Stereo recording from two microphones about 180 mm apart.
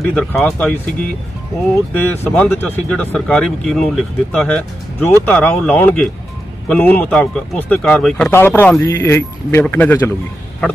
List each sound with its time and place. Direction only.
0.0 s speech: 5° left (ahead or behind)
2.0 s speech: 10° left (ahead or behind)